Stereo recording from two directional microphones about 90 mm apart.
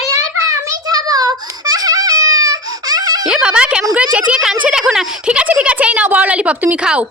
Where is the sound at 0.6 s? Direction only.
40° right (ahead or behind).